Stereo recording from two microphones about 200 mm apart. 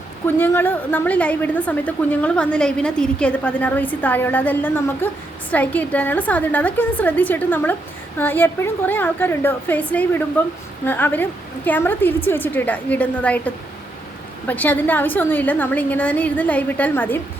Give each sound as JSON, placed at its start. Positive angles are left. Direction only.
{"t": 0.3, "sound": "a woman's voice", "side_deg": 10}